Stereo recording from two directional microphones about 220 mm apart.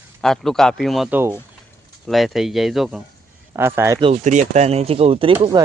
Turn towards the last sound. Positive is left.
turn(degrees=-20)  # may be behind; listen again after turning